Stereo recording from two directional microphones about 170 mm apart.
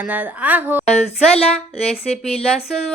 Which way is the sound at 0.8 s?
40° left (ahead or behind).